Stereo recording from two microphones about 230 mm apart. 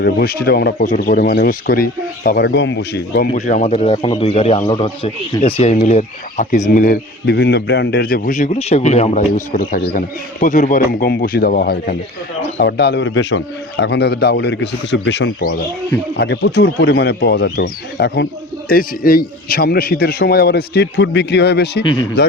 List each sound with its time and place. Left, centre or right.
0.0 s speech: left
3.3 s a man's voice: left